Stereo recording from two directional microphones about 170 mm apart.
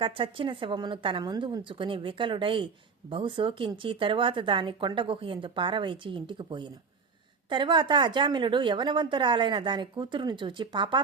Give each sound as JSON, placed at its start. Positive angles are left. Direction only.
{"t": 0.0, "sound": "speech", "side_deg": -30}